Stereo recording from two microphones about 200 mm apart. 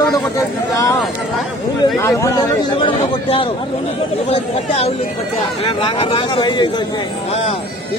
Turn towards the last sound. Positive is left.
turn(degrees=25)  # may be behind; listen again after turning